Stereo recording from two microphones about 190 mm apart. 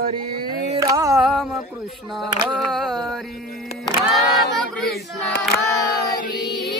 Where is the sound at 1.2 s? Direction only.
Centre (ahead or behind).